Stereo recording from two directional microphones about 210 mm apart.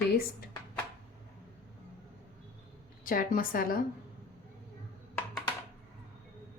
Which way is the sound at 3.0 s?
40° left (ahead or behind).